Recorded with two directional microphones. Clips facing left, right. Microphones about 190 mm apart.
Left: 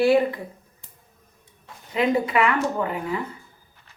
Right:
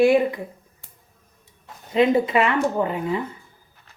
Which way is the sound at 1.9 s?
25° right (ahead or behind).